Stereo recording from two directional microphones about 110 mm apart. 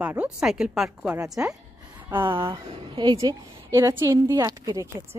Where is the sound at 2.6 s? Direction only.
55° right (ahead or behind).